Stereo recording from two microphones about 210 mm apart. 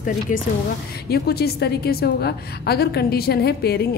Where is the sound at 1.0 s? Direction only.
50° left (ahead or behind).